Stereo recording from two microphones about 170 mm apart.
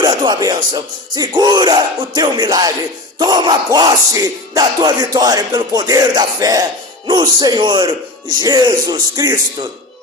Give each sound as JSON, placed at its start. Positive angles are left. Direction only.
{"t": 0.0, "sound": "music", "side_deg": -25}